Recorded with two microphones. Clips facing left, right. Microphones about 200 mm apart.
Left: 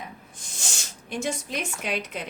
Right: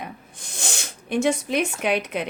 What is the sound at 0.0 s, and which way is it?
Snort, 65° right (ahead or behind).